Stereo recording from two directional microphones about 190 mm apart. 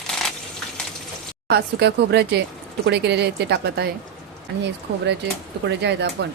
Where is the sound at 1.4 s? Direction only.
60° right (ahead or behind).